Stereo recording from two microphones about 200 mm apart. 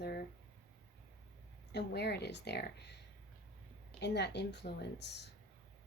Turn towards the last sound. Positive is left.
turn(degrees=55)  # may be behind; listen again after turning